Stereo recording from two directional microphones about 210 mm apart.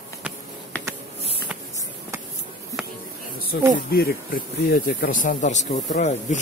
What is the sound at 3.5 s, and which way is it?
Speech, 45° left (ahead or behind).